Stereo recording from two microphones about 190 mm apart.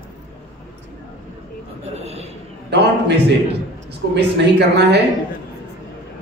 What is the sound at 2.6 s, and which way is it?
A man's voice, 65° right (ahead or behind).